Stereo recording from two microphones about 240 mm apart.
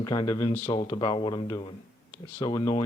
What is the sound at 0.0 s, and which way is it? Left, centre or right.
Speech, centre.